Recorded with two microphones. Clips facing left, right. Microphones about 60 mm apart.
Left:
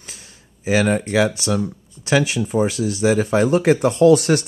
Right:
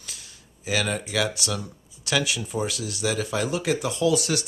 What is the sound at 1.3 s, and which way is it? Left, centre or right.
Speech, left.